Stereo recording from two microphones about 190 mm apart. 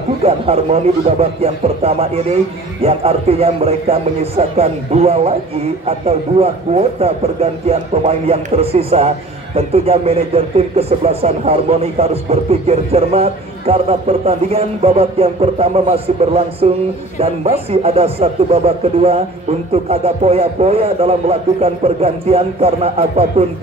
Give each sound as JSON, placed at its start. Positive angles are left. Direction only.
{"t": 0.2, "sound": "speech", "side_deg": -30}